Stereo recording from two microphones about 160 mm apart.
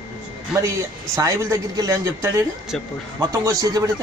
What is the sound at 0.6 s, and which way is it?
A man's voice, 20° right (ahead or behind).